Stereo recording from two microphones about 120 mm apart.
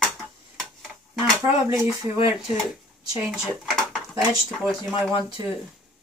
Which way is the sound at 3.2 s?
Centre (ahead or behind).